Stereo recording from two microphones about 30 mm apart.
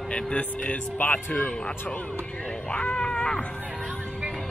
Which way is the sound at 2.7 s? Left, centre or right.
Left.